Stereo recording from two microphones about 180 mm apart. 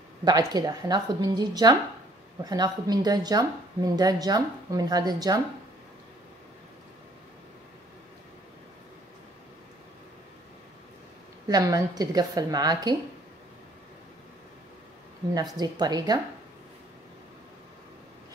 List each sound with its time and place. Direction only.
0.2 s speech: 20° right (ahead or behind)
11.4 s speech: 20° right (ahead or behind)
15.3 s speech: 20° right (ahead or behind)